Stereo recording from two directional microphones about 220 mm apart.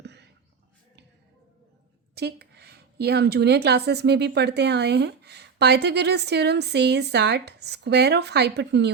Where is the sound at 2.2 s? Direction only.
45° right (ahead or behind).